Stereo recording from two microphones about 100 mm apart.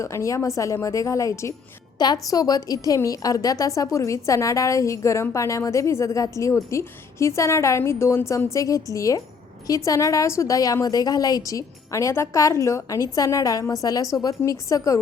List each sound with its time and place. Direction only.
0.0 s a woman's voice: 30° left (ahead or behind)